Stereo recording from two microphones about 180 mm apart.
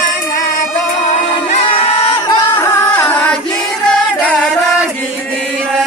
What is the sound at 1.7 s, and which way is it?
Singing, 30° left (ahead or behind).